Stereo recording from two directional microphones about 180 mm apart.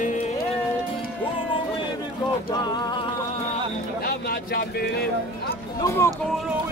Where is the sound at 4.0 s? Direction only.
55° left (ahead or behind).